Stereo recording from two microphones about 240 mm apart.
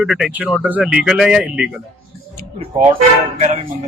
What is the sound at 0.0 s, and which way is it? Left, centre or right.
Speech, centre.